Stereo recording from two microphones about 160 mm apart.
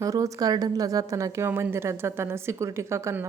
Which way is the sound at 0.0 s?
20° right (ahead or behind).